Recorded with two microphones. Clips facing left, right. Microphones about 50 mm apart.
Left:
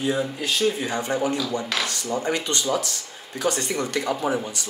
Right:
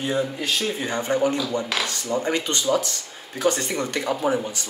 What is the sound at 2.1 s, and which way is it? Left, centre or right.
Speech, right.